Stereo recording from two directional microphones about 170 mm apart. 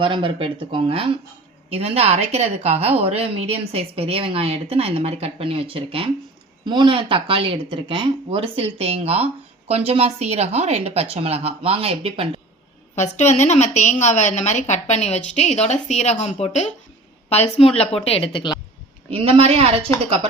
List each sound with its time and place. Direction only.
0.0 s speech: 30° right (ahead or behind)
13.0 s a woman's voice: 45° left (ahead or behind)
19.1 s speech: 35° right (ahead or behind)